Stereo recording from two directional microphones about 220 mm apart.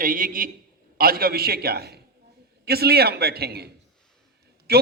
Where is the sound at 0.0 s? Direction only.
40° right (ahead or behind).